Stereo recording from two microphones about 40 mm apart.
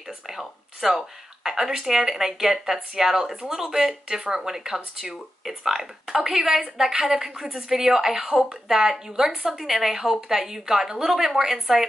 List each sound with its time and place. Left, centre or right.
0.3 s speech: centre
9.5 s speech: centre